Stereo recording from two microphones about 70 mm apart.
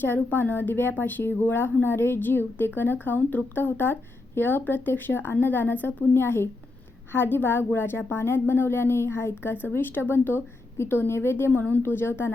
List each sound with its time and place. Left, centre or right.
0.0 s speech: left